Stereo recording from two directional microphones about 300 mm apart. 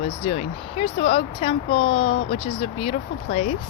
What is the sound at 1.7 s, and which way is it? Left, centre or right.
Speech, left.